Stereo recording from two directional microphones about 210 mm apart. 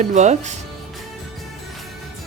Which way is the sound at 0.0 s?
35° right (ahead or behind).